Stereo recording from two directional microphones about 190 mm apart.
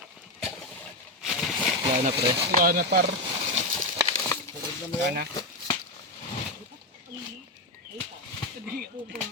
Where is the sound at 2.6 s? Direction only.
50° right (ahead or behind).